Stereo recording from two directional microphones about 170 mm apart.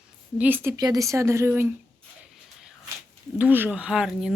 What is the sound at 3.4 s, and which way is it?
Speech, 10° right (ahead or behind).